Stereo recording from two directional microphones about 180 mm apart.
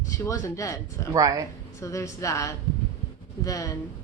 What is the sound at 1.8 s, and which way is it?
Speech, 15° left (ahead or behind).